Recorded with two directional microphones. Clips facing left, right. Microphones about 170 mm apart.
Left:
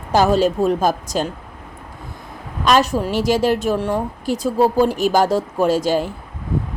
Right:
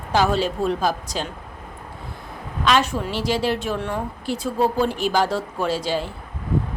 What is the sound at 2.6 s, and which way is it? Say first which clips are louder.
A woman's voice: left 4 dB; 40° left (ahead or behind).